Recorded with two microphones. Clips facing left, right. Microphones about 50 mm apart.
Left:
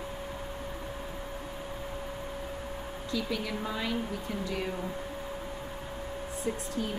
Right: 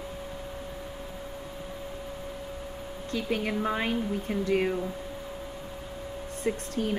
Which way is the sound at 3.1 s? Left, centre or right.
Right.